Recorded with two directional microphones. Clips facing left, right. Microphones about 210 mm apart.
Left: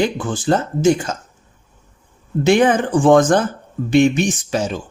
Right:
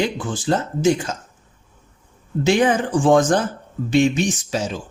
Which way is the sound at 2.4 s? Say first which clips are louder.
Left 3 dB; 55° left (ahead or behind).